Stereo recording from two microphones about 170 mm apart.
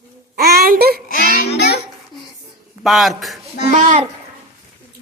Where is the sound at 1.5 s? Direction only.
75° left (ahead or behind).